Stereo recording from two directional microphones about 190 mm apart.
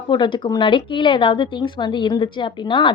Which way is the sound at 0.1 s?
25° left (ahead or behind).